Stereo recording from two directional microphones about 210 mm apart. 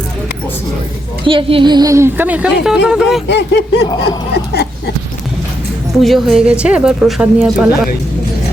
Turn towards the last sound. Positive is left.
turn(degrees=-5)  # may be behind; listen again after turning